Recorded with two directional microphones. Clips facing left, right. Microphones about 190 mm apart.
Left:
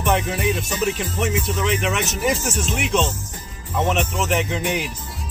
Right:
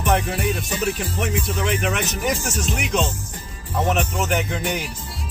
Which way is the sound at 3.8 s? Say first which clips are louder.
Even; 40° right (ahead or behind).